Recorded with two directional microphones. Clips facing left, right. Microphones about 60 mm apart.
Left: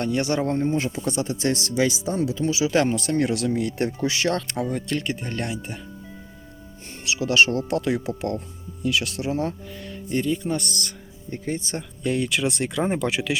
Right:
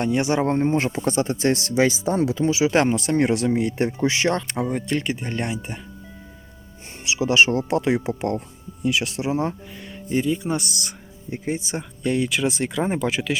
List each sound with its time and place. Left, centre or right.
0.0 s speech: right
7.0 s speech: right
12.0 s speech: centre